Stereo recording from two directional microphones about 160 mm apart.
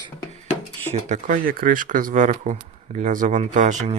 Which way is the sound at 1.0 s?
50° right (ahead or behind).